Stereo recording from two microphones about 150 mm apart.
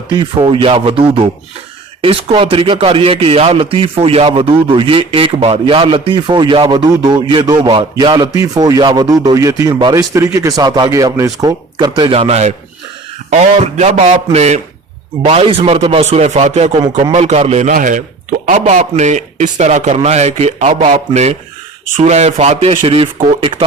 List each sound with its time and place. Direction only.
0.1 s a man's voice: 30° right (ahead or behind)